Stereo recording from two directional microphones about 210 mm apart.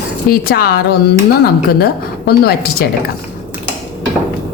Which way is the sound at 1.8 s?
50° left (ahead or behind).